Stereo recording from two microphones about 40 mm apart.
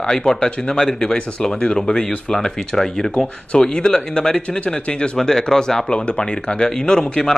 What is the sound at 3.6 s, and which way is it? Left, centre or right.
A man's voice, left.